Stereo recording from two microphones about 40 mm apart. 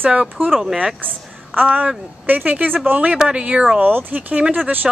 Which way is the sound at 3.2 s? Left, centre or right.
Right.